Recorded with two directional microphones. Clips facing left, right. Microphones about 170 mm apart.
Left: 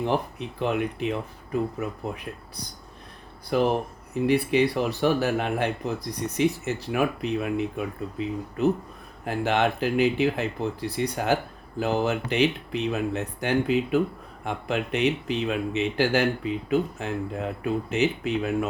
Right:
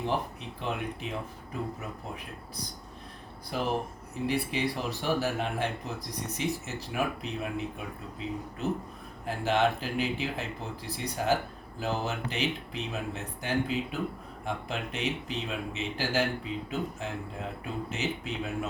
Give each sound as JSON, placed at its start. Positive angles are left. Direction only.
{"t": 0.0, "sound": "speech", "side_deg": 65}
{"t": 3.5, "sound": "speech", "side_deg": 65}
{"t": 9.2, "sound": "speech", "side_deg": 65}